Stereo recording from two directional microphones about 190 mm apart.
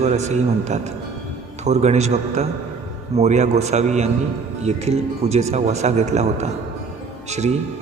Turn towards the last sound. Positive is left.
turn(degrees=-35)  # may be behind; listen again after turning